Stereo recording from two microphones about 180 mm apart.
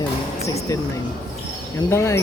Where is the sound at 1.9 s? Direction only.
15° left (ahead or behind).